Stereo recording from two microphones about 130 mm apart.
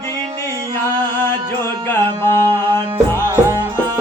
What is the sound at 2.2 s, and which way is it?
Music, 15° left (ahead or behind).